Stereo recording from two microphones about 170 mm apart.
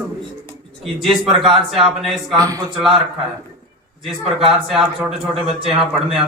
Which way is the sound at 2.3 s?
20° right (ahead or behind).